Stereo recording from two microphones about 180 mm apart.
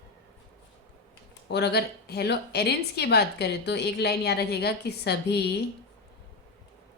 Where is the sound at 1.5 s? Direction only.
65° left (ahead or behind).